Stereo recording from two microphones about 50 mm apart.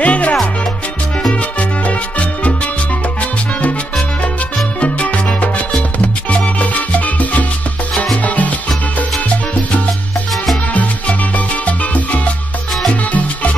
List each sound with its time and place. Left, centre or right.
0.0 s music: left
1.6 s salsa music: left
4.7 s music: left
6.3 s salsa music: left
8.2 s music: left
10.7 s salsa music: left